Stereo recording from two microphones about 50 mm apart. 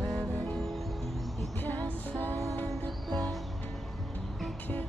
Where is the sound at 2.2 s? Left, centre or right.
Right.